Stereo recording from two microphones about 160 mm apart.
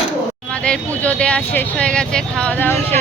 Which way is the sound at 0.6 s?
10° left (ahead or behind).